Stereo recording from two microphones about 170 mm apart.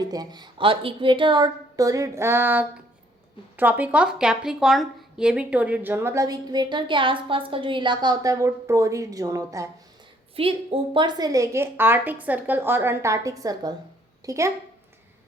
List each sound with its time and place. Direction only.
0.0 s a woman's voice: 20° right (ahead or behind)
10.3 s speech: 35° right (ahead or behind); by 14.5 s 20° right (ahead or behind)